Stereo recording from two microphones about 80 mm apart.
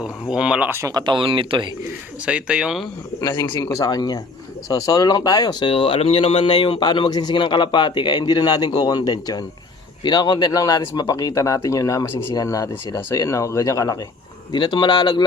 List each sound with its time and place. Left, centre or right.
0.0 s speech: centre
0.9 s speech: right
1.1 s speech: right
2.2 s speech: centre
3.2 s a man's voice: left
10.0 s speech: left
14.5 s a man's voice: left